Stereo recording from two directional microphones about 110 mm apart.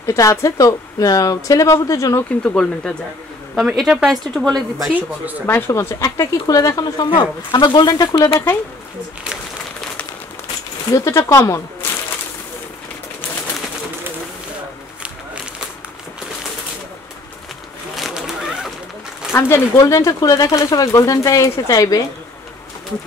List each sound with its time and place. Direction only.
0.0 s speech: 30° left (ahead or behind)
2.4 s speech: 10° left (ahead or behind)
3.5 s speech: 5° right (ahead or behind)
5.5 s speech: 25° left (ahead or behind)
10.9 s speech: 30° left (ahead or behind)
17.9 s a sound: centre (ahead or behind)
19.3 s speech: 25° left (ahead or behind)